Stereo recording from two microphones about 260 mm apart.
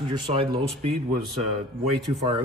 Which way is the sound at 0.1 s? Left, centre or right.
Right.